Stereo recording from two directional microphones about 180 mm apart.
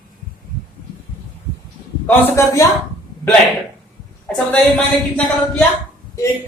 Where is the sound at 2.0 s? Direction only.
15° left (ahead or behind).